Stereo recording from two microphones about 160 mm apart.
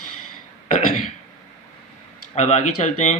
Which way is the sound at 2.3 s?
45° left (ahead or behind).